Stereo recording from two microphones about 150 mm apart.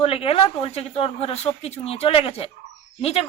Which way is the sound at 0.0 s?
40° left (ahead or behind).